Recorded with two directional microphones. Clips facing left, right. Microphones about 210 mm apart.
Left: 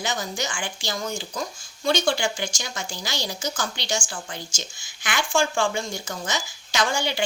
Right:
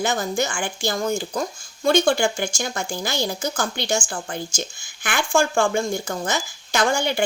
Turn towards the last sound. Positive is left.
turn(degrees=-55)  # may be behind; listen again after turning